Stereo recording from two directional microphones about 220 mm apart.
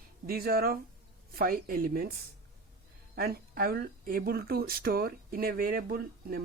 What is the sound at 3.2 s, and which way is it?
Speech, 45° right (ahead or behind).